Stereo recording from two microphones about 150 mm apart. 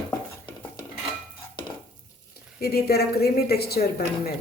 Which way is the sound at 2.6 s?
90° left.